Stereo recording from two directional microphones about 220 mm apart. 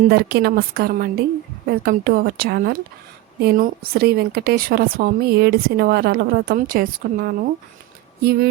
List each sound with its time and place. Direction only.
0.1 s speech: 45° right (ahead or behind)